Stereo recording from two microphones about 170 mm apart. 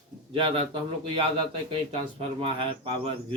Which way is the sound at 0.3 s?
30° right (ahead or behind).